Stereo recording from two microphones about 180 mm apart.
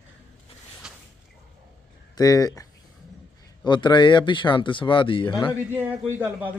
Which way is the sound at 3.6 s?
25° left (ahead or behind).